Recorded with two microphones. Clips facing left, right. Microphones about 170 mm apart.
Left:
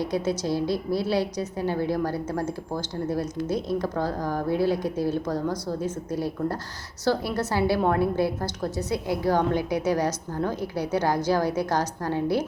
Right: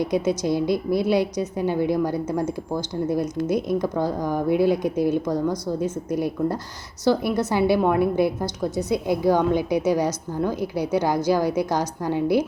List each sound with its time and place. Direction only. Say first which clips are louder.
0.0 s a woman's voice: right 4 dB; 15° right (ahead or behind)